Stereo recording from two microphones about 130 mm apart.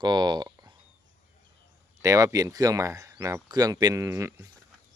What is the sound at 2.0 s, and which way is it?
Speech, 25° right (ahead or behind).